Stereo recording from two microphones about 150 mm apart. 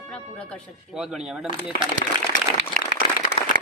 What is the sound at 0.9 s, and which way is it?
Speech, 5° right (ahead or behind).